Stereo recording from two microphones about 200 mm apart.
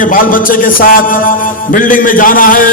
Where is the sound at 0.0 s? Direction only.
45° left (ahead or behind).